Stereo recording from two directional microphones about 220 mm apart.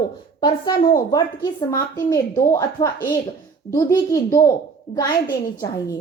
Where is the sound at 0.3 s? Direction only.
20° left (ahead or behind).